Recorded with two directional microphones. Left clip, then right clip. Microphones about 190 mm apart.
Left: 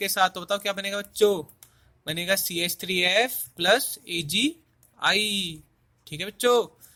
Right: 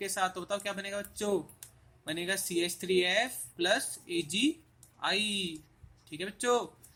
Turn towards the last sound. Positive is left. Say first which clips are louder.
# left 8 dB
turn(degrees=50)  # may be behind; listen again after turning